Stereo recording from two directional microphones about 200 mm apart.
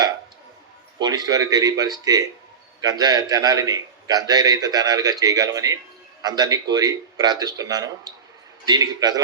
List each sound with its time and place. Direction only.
0.9 s a man's voice: 20° right (ahead or behind)